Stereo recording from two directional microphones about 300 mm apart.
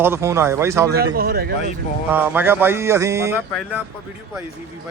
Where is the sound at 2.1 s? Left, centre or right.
Centre.